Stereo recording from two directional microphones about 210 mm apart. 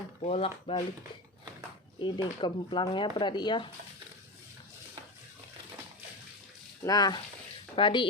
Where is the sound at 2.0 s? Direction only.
20° left (ahead or behind).